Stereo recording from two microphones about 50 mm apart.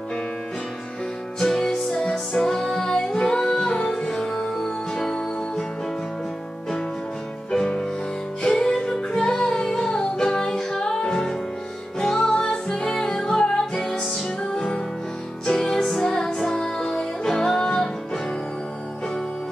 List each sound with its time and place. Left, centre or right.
1.4 s music: centre
7.5 s music: centre